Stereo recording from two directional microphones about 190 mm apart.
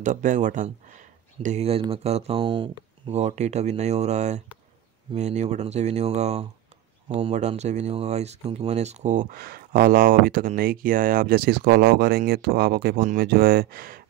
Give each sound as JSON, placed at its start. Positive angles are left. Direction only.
{"t": 0.0, "sound": "speech", "side_deg": -40}